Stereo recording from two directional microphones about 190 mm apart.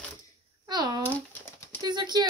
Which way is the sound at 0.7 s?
20° right (ahead or behind).